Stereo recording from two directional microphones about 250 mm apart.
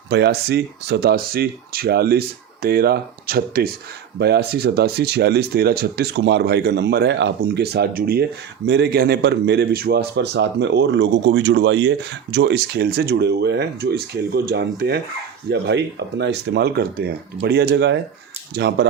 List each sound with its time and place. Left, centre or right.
0.1 s speech: right